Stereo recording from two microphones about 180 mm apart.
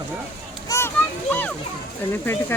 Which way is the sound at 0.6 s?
15° left (ahead or behind).